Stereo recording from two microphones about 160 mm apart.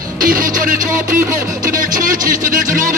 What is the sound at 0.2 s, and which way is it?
Speech, 60° right (ahead or behind).